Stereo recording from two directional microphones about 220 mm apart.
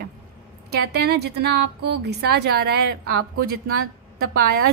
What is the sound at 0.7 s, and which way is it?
A woman's voice, 50° right (ahead or behind).